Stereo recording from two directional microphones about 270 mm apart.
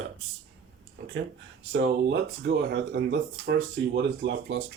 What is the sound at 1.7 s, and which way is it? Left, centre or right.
Speech, right.